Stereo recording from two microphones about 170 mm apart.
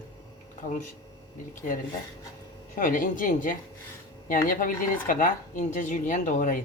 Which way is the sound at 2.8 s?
55° left (ahead or behind).